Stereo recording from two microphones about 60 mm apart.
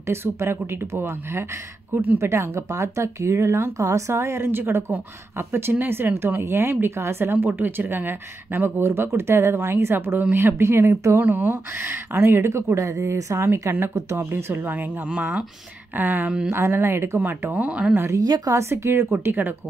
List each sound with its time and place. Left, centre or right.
0.0 s speech: right
3.7 s speech: right
4.1 s a woman's voice: right
16.3 s speech: centre
16.5 s speech: right
17.2 s a woman's voice: right
17.6 s speech: centre
18.1 s a woman's voice: right
18.6 s speech: right